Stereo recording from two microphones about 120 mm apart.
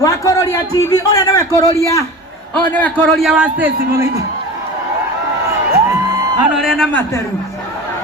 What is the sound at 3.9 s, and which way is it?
Speech, 25° right (ahead or behind).